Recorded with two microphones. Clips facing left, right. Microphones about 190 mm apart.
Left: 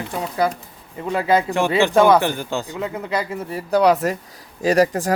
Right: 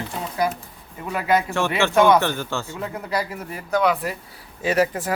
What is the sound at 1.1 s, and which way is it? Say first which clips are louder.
Speech: left 3 dB; 25° left (ahead or behind).